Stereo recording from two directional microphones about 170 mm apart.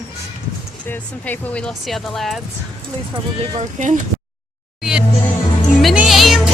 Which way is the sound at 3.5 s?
45° right (ahead or behind).